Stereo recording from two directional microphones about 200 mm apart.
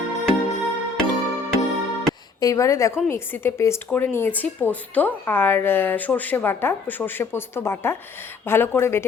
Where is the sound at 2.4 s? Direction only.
15° left (ahead or behind).